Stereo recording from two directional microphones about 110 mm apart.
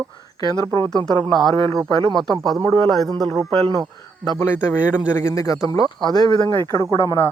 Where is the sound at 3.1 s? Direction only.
35° right (ahead or behind).